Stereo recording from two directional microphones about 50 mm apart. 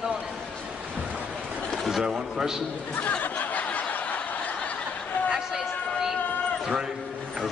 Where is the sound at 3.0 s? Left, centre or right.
Left.